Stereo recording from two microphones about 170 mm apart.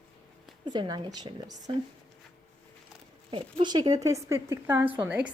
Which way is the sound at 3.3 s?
30° right (ahead or behind).